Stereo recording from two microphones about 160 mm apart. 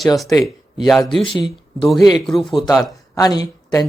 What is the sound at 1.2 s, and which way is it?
Speech, 30° left (ahead or behind).